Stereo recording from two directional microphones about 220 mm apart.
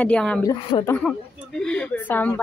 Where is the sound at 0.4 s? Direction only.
20° left (ahead or behind).